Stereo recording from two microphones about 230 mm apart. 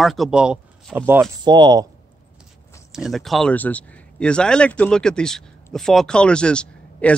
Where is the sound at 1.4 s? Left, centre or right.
Centre.